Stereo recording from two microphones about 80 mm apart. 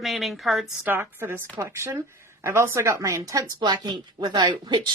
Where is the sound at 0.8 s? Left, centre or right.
Right.